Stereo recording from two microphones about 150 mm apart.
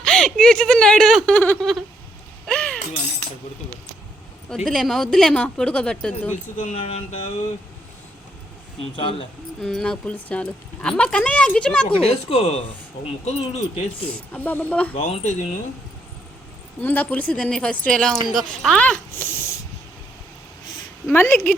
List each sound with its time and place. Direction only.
0.0 s speech: 5° left (ahead or behind)
1.4 s speech: 10° left (ahead or behind)
2.5 s mechanisms: 5° left (ahead or behind)
4.4 s speech: centre (ahead or behind)
6.8 s speech: 50° left (ahead or behind)
8.8 s speech: 35° left (ahead or behind)
9.6 s speech: 5° left (ahead or behind)
11.9 s speech: 40° left (ahead or behind)
14.0 s speech: 10° left (ahead or behind)
15.1 s speech: 50° left (ahead or behind)
16.8 s speech: 10° left (ahead or behind)
21.1 s speech: 15° left (ahead or behind)